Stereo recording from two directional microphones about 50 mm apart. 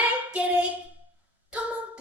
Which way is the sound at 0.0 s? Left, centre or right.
Right.